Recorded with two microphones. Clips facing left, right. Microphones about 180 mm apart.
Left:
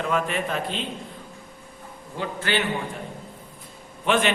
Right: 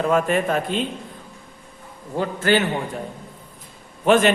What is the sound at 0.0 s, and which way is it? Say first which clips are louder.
Speech: right 6 dB; 45° right (ahead or behind).